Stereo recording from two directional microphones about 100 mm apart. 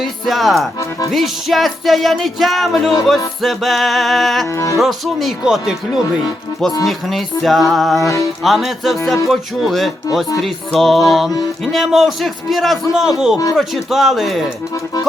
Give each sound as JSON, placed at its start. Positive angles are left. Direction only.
{"t": 0.0, "sound": "music", "side_deg": 0}
{"t": 0.8, "sound": "speech", "side_deg": 30}
{"t": 1.1, "sound": "music", "side_deg": 0}
{"t": 4.5, "sound": "speech", "side_deg": 35}
{"t": 4.8, "sound": "music", "side_deg": 0}
{"t": 8.0, "sound": "speech", "side_deg": 35}
{"t": 8.4, "sound": "music", "side_deg": 0}